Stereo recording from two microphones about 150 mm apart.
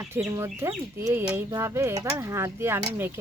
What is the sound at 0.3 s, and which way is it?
Speech, 15° right (ahead or behind).